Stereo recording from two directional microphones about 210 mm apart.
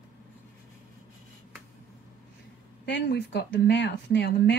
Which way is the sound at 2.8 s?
55° left (ahead or behind).